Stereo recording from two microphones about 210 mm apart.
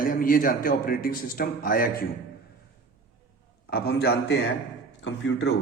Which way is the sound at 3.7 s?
50° left (ahead or behind).